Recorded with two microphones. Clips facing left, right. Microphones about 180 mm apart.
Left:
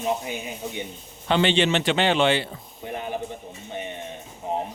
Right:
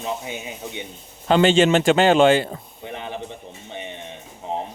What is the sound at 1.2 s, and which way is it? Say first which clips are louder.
A man's voice: right 5 dB; 45° right (ahead or behind).